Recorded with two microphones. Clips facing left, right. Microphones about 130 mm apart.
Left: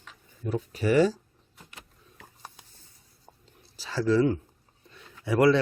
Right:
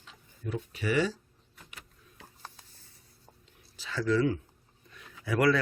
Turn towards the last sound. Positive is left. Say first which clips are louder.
# left 5 dB
turn(degrees=25)  # may be behind; listen again after turning